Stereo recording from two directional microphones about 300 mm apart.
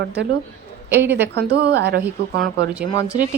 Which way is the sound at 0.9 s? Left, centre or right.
Centre.